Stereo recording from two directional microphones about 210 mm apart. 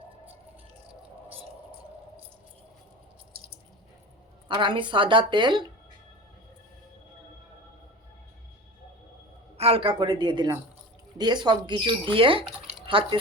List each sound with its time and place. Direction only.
4.4 s speech: 25° right (ahead or behind)
9.6 s speech: 25° right (ahead or behind)